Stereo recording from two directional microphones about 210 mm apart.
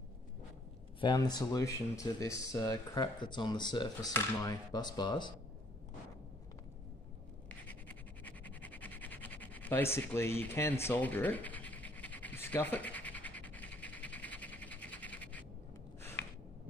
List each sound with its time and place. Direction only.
1.0 s speech: 20° left (ahead or behind)
7.4 s scratch: 5° left (ahead or behind)